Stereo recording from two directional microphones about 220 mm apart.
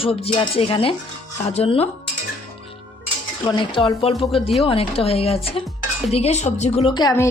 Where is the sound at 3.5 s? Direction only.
20° left (ahead or behind).